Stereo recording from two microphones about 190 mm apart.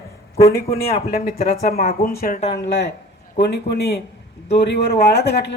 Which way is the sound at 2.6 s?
60° left (ahead or behind).